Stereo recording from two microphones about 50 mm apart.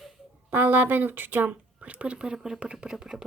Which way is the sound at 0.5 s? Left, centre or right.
Right.